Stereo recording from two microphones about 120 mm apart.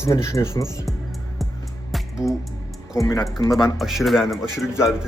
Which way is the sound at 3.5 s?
Centre (ahead or behind).